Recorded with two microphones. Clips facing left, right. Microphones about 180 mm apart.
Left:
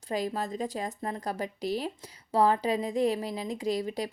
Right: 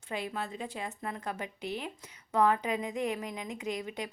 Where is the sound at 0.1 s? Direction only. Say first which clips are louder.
Left 5 dB; 40° left (ahead or behind).